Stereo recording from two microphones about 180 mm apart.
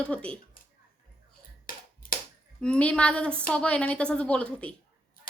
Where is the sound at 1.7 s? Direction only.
50° left (ahead or behind).